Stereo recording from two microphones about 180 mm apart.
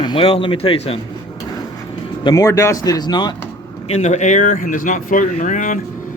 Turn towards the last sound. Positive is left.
turn(degrees=45)  # may be behind; listen again after turning